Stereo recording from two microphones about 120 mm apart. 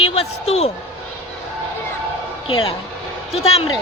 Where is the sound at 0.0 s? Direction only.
55° left (ahead or behind).